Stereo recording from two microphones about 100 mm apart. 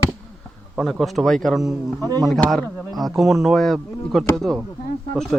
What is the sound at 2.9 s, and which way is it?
Speech, centre (ahead or behind).